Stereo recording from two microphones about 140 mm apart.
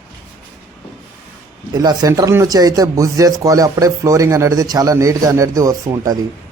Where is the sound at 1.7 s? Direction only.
30° right (ahead or behind).